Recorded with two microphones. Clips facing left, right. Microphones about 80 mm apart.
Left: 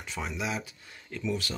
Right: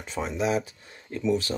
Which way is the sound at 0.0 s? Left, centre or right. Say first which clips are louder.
Right 7 dB; right.